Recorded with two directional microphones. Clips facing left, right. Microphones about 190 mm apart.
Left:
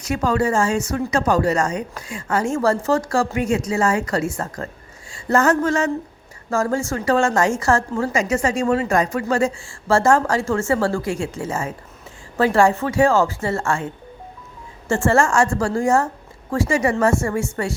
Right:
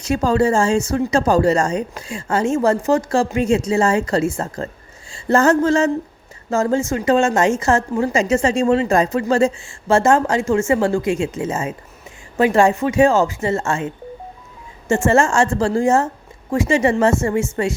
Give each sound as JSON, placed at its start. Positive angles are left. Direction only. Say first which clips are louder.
{"t": 0.0, "sound": "a woman's voice", "louder": "right 3 dB", "side_deg": -30}
{"t": 5.1, "sound": "a sound", "louder": "right 3 dB", "side_deg": -30}
{"t": 6.5, "sound": "a woman's voice", "louder": "right 3 dB", "side_deg": -20}